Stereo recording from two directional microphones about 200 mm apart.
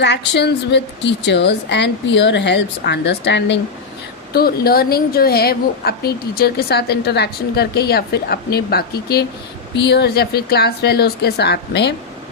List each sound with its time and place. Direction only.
0.0 s a woman's voice: 60° left (ahead or behind)